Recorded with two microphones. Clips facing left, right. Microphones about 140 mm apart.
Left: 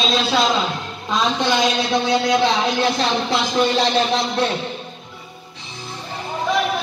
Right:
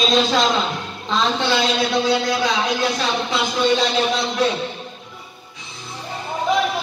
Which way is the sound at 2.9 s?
35° left (ahead or behind).